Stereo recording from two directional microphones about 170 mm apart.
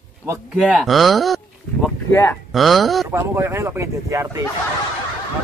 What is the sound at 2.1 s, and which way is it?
Speech, 15° left (ahead or behind).